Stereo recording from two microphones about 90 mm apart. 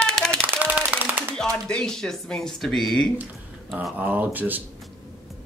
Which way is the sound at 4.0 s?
20° right (ahead or behind).